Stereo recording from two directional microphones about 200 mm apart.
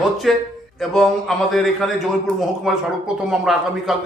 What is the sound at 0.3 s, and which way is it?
Speech, centre (ahead or behind).